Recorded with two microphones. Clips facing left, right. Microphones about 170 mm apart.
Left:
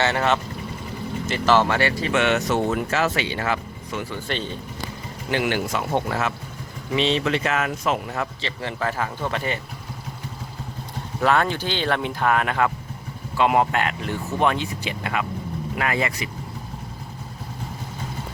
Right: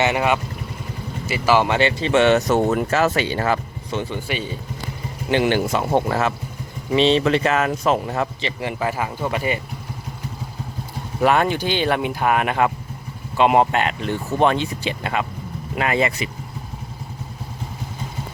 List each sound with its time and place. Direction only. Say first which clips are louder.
0.0 s speech: right 2 dB; 15° right (ahead or behind); by 4.0 s 40° right (ahead or behind)
4.3 s speech: right 2 dB; 10° right (ahead or behind)
5.3 s speech: right 5 dB; 25° right (ahead or behind)
8.4 s speech: right 3 dB; 15° right (ahead or behind)
11.2 s speech: right 3 dB; 15° right (ahead or behind)